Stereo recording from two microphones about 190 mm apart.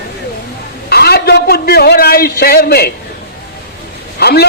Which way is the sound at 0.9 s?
55° left (ahead or behind).